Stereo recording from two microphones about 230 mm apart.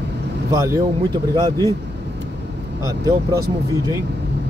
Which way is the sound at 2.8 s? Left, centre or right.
Centre.